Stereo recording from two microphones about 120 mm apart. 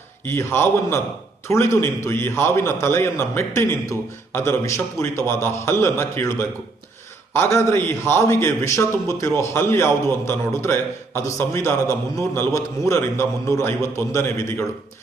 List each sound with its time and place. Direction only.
0.3 s a man's voice: 20° left (ahead or behind)
7.3 s a man's voice: 20° left (ahead or behind)